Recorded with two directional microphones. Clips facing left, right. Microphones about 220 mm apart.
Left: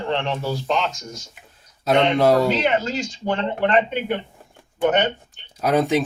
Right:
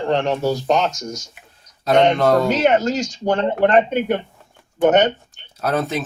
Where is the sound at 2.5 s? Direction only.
45° right (ahead or behind).